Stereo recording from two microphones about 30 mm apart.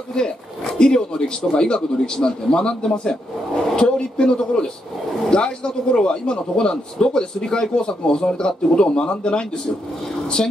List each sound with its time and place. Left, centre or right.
0.7 s a man's voice: left